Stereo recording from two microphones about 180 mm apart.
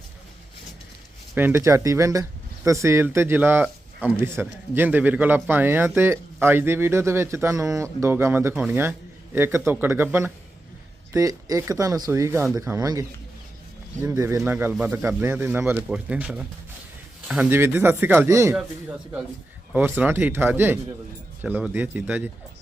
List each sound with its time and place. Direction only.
1.4 s speech: 10° right (ahead or behind)
14.1 s speech: 15° right (ahead or behind)